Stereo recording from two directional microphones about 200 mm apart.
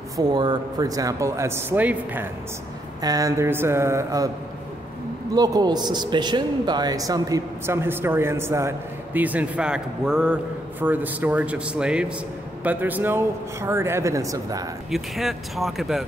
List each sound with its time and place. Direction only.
0.2 s a man's voice: 20° right (ahead or behind)
5.3 s a man's voice: 20° right (ahead or behind)
14.9 s speech: centre (ahead or behind)